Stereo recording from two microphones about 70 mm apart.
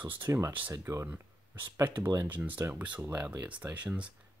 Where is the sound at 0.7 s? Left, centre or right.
Right.